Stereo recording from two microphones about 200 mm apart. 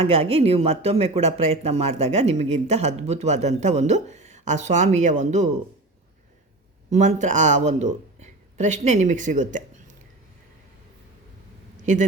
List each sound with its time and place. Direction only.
0.0 s speech: 30° right (ahead or behind)
6.9 s speech: 35° right (ahead or behind)
11.8 s a man's voice: 40° right (ahead or behind)